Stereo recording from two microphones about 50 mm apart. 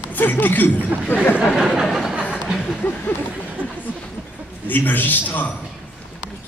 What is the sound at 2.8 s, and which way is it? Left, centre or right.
A man's voice, left.